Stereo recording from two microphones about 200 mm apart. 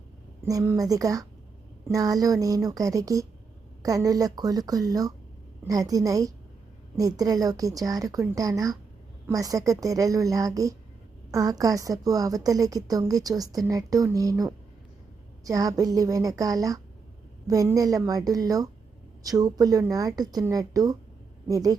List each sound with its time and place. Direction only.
0.4 s a woman's voice: 15° right (ahead or behind)